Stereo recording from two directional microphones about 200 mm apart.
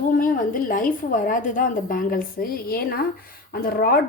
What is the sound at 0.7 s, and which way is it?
A woman's voice, 45° left (ahead or behind).